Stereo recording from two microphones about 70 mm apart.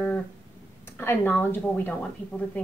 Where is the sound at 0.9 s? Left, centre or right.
Left.